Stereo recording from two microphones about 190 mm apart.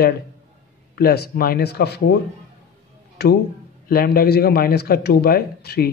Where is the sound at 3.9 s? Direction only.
50° left (ahead or behind).